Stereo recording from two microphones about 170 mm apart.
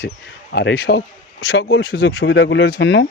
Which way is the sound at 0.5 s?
80° left.